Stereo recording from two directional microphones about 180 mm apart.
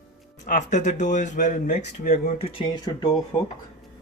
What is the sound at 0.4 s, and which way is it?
Speech, 45° left (ahead or behind).